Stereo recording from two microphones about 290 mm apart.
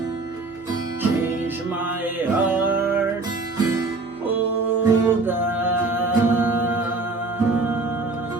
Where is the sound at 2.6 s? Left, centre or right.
Centre.